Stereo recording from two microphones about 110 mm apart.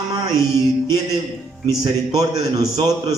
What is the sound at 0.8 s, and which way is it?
A man's voice, 35° right (ahead or behind).